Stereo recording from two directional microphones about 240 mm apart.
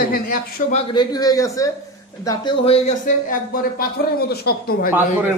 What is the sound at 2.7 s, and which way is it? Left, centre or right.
Speech, left.